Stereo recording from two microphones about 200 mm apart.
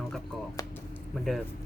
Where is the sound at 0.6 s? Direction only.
15° left (ahead or behind).